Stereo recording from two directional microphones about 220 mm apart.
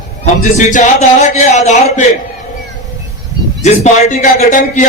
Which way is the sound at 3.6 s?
30° left (ahead or behind).